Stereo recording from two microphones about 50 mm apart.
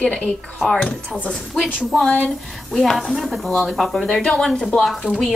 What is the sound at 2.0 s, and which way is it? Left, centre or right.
Speech, left.